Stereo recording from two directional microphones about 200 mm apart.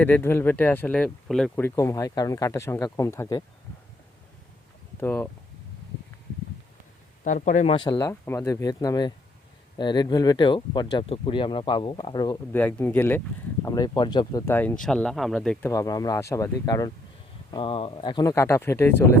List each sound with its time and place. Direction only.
0.0 s speech: 10° left (ahead or behind)
4.9 s speech: 10° left (ahead or behind)
7.3 s speech: 40° left (ahead or behind); by 12.4 s 20° left (ahead or behind)
12.5 s speech: 10° left (ahead or behind)
15.7 s speech: 15° left (ahead or behind)